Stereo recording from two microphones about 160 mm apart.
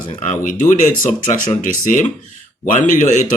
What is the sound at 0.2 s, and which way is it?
A man's voice, 50° left (ahead or behind).